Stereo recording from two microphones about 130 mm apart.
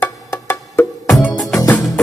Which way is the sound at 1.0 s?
Centre (ahead or behind).